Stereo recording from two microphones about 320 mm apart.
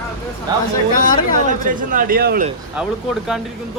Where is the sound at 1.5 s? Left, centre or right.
Right.